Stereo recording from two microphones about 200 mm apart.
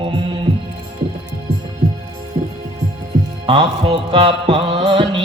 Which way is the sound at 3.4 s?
25° right (ahead or behind).